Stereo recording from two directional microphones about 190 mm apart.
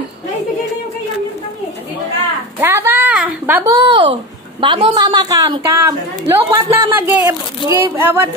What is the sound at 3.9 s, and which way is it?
A woman's voice, 25° right (ahead or behind).